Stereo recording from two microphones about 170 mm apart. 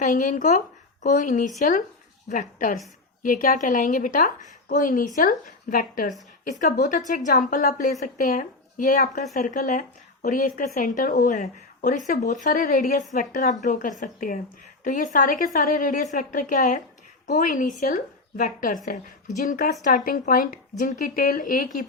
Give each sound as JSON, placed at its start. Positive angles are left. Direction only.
{"t": 0.0, "sound": "a woman's voice", "side_deg": 45}